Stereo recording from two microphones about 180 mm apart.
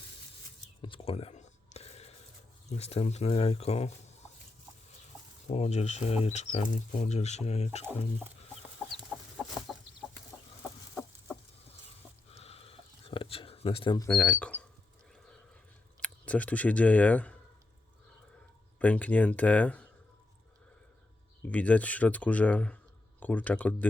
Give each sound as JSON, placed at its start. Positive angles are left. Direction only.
{"t": 0.8, "sound": "a sound", "side_deg": 30}
{"t": 2.6, "sound": "speech", "side_deg": 35}
{"t": 5.5, "sound": "speech", "side_deg": 40}
{"t": 9.0, "sound": "chicken", "side_deg": 0}
{"t": 12.3, "sound": "a sound", "side_deg": 35}
{"t": 14.1, "sound": "speech", "side_deg": 5}
{"t": 16.0, "sound": "speech", "side_deg": 5}
{"t": 18.8, "sound": "speech", "side_deg": 10}
{"t": 21.4, "sound": "speech", "side_deg": 10}